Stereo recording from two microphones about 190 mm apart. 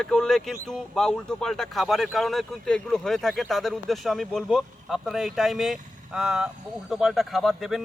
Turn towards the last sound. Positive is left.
turn(degrees=0)  # may be behind; listen again after turning